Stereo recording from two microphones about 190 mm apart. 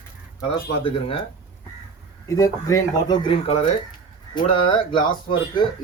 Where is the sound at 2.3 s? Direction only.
15° left (ahead or behind).